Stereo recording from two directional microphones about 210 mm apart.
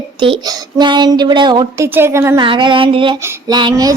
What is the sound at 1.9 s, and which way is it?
Speech, 10° right (ahead or behind).